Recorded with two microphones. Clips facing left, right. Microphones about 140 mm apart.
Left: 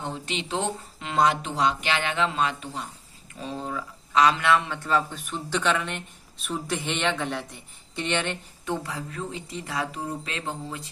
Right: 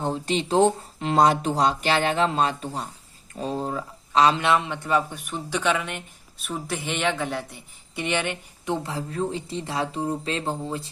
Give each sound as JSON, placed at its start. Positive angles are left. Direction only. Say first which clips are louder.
{"t": 0.0, "sound": "speech", "louder": "right 7 dB", "side_deg": -40}